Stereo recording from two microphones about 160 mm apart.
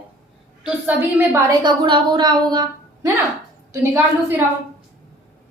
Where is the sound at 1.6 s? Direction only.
30° right (ahead or behind).